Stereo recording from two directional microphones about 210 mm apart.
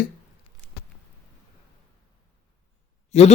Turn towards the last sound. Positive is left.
turn(degrees=30)  # may be behind; listen again after turning